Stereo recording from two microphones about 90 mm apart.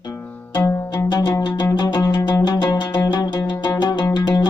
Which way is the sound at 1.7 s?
50° left (ahead or behind).